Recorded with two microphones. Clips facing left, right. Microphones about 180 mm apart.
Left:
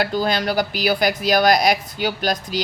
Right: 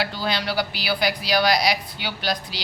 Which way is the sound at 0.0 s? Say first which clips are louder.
Left 6 dB; 50° left (ahead or behind).